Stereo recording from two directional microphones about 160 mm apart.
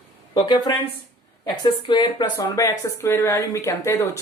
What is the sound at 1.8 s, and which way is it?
Speech, 30° left (ahead or behind).